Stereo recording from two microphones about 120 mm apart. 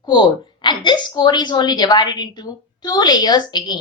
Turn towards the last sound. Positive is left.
turn(degrees=35)  # may be behind; listen again after turning